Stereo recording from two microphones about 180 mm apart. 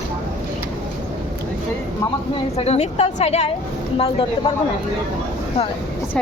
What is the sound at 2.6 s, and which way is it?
A woman's voice, 35° left (ahead or behind).